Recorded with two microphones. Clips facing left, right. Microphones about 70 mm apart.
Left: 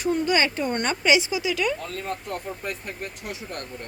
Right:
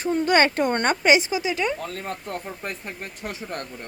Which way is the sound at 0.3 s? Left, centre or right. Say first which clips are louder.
Right 4 dB; right.